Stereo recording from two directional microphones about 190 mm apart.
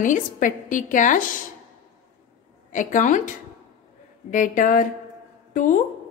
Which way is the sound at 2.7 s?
40° left (ahead or behind).